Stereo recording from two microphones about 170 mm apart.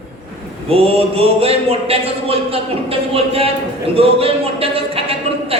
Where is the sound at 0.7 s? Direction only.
35° right (ahead or behind).